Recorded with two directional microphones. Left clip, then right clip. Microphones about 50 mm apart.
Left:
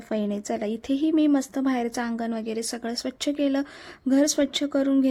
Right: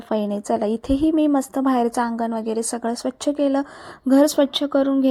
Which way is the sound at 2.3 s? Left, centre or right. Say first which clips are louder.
Right 6 dB; centre.